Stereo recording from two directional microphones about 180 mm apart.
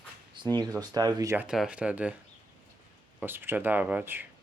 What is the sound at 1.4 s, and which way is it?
Speech, 5° right (ahead or behind).